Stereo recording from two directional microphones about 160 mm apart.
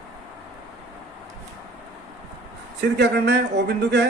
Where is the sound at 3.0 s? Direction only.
90° right.